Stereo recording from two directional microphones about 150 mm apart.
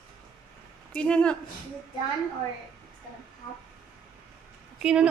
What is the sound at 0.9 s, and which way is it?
Speech, 5° left (ahead or behind).